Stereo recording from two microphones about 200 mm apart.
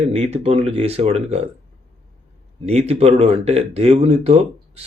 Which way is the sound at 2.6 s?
30° right (ahead or behind).